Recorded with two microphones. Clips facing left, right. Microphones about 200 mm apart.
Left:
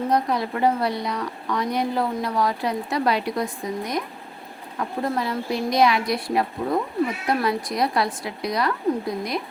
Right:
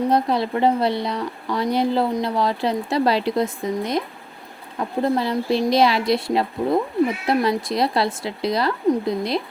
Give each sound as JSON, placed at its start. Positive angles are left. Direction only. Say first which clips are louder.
{"t": 0.1, "sound": "speech", "louder": "right 3 dB", "side_deg": -30}